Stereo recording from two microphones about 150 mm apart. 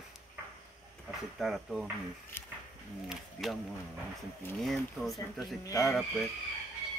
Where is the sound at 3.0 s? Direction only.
Centre (ahead or behind).